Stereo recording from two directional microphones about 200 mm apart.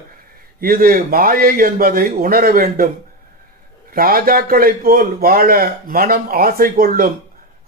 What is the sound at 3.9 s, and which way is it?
Speech, 45° right (ahead or behind).